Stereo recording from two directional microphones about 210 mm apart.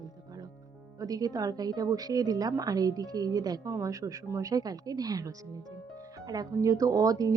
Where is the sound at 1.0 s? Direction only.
15° right (ahead or behind).